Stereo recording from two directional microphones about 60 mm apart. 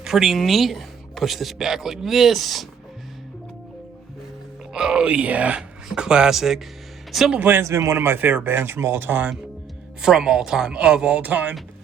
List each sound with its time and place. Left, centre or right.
0.0 s speech: centre
4.7 s speech: centre
7.3 s speech: right
7.6 s speech: right
10.0 s speech: centre; by 11.5 s right